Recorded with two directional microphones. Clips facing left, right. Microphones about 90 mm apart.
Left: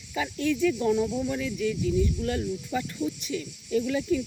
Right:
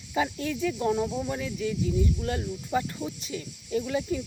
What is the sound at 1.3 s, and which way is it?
Speech, 25° right (ahead or behind).